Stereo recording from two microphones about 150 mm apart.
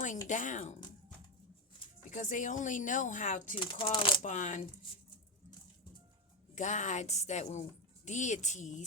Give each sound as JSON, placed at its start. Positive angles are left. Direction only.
{"t": 0.3, "sound": "speech", "side_deg": 55}
{"t": 2.0, "sound": "speech", "side_deg": 60}
{"t": 3.6, "sound": "speech", "side_deg": 35}
{"t": 4.2, "sound": "a woman's voice", "side_deg": 55}
{"t": 6.6, "sound": "a woman's voice", "side_deg": 55}